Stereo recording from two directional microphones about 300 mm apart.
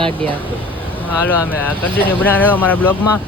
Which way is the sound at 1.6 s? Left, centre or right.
Centre.